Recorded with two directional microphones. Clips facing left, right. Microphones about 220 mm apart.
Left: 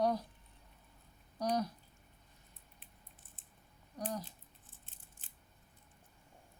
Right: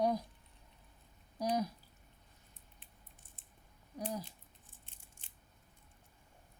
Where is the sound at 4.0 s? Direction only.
10° right (ahead or behind).